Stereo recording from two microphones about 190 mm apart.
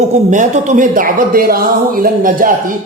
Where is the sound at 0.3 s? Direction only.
40° right (ahead or behind).